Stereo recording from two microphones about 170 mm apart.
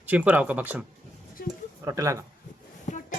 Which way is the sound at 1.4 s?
60° left (ahead or behind).